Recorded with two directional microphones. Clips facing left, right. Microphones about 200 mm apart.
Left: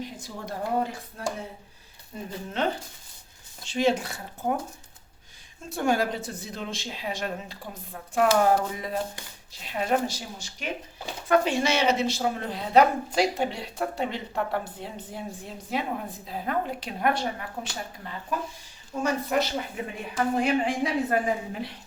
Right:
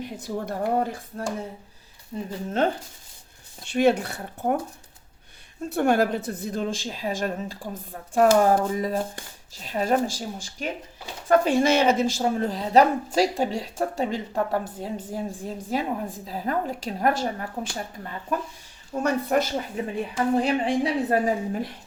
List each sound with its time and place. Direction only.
0.0 s speech: 55° right (ahead or behind)
1.2 s a woman's voice: 40° right (ahead or behind)
3.7 s speech: 60° right (ahead or behind)
5.7 s a woman's voice: 60° right (ahead or behind); by 17.7 s 40° right (ahead or behind)
19.0 s speech: 50° right (ahead or behind)
19.8 s a woman's voice: 35° right (ahead or behind)